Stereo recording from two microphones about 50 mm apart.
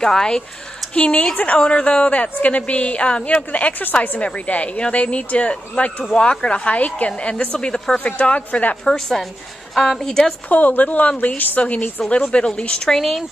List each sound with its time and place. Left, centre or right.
0.0 s a woman's voice: centre
0.9 s speech: left
8.8 s a woman's voice: centre
10.5 s a woman's voice: left
12.9 s speech: centre